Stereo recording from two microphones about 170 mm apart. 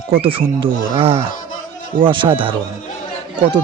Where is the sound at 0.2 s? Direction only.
30° right (ahead or behind).